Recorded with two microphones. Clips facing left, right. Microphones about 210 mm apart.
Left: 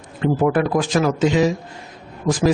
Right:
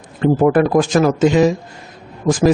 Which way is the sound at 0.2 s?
45° right (ahead or behind).